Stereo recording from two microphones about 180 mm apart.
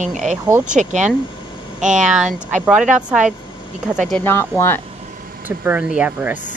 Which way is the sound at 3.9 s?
5° left (ahead or behind).